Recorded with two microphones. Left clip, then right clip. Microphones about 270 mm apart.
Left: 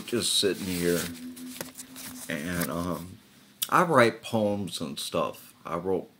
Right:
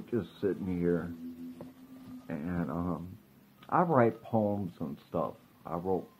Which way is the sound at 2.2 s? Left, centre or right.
Left.